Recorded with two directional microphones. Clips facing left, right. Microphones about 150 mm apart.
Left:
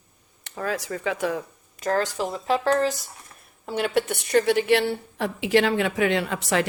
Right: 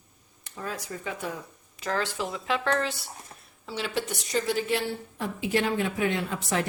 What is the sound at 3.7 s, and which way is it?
A woman's voice, 55° left (ahead or behind).